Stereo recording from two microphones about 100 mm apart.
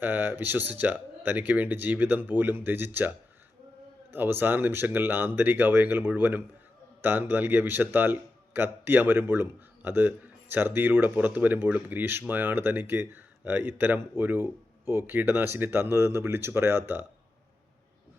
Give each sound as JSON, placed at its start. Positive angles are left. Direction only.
{"t": 0.0, "sound": "a man's voice", "side_deg": -20}